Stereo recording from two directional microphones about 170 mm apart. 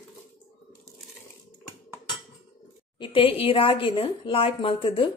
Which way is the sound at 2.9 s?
30° left (ahead or behind).